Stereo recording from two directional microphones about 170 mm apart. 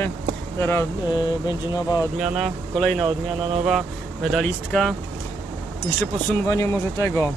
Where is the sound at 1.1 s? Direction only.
25° left (ahead or behind).